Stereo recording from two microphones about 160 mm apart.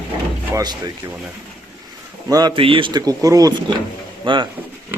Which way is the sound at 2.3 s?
25° right (ahead or behind).